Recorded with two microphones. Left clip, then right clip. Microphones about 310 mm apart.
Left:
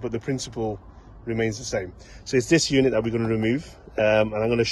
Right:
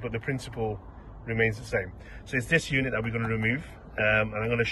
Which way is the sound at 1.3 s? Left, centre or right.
Centre.